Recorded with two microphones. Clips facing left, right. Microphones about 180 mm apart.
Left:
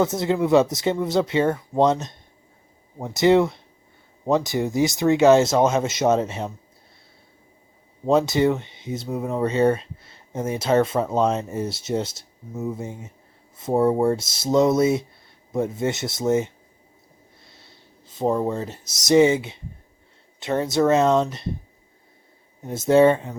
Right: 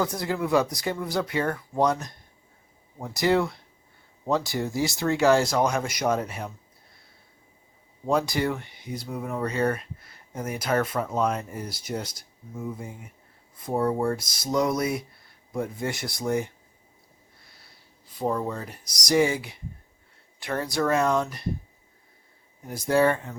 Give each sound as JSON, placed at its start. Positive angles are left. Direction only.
{"t": 0.0, "sound": "speech", "side_deg": 25}
{"t": 8.0, "sound": "speech", "side_deg": 25}
{"t": 22.6, "sound": "speech", "side_deg": 25}